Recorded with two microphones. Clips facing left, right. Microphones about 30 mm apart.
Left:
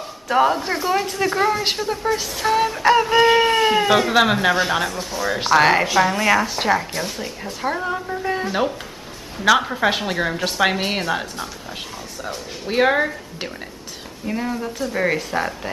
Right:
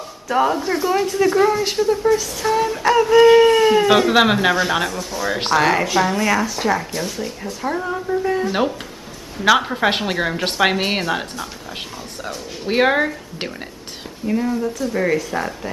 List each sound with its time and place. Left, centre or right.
0.3 s speech: centre
3.8 s speech: centre
5.6 s speech: centre
5.9 s speech: centre
6.4 s speech: left
6.8 s speech: centre
8.5 s speech: centre
9.8 s a woman's voice: centre
12.6 s speech: centre
14.2 s speech: centre